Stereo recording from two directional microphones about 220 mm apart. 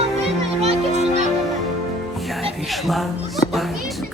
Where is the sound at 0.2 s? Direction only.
30° right (ahead or behind).